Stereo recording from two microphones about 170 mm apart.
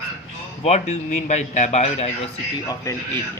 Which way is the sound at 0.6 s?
40° left (ahead or behind).